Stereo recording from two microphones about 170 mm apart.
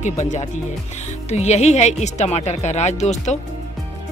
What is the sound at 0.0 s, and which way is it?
Speech, 45° left (ahead or behind).